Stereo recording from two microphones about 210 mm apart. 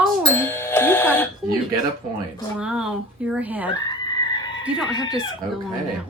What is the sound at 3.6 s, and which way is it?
Goat, 20° left (ahead or behind).